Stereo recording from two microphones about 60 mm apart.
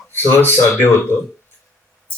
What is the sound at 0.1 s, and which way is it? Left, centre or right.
Speech, left.